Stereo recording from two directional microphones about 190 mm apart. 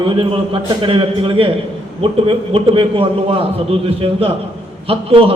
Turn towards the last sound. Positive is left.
turn(degrees=-30)  # may be behind; listen again after turning